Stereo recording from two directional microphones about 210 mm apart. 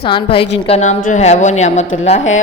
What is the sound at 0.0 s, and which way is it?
A woman's voice, 25° left (ahead or behind).